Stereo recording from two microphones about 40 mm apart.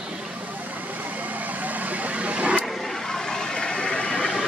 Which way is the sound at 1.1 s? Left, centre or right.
Right.